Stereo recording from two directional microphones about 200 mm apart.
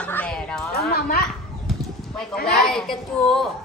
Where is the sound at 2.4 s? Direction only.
Centre (ahead or behind).